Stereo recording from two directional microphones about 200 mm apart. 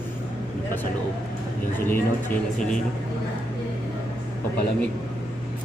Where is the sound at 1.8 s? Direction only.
10° left (ahead or behind).